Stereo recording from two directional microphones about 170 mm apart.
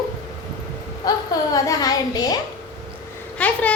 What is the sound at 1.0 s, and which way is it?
A woman's voice, 25° left (ahead or behind).